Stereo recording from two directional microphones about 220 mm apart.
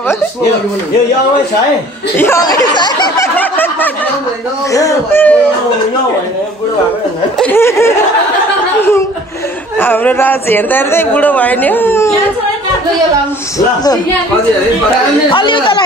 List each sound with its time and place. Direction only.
2.1 s a man's voice: 10° left (ahead or behind)
3.3 s snicker: 10° left (ahead or behind)
4.7 s a man's voice: 10° left (ahead or behind)
7.3 s a man's voice: 10° left (ahead or behind)
9.8 s a man's voice: 10° left (ahead or behind)
15.2 s speech: 20° left (ahead or behind)